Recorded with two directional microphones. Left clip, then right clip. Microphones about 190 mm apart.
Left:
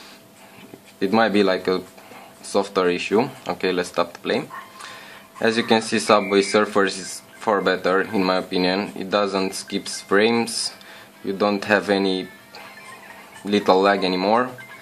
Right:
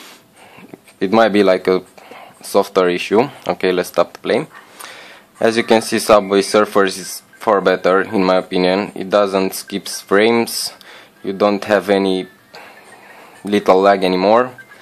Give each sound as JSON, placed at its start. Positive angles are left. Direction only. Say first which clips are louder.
{"t": 0.9, "sound": "speech", "louder": "right 6 dB", "side_deg": -50}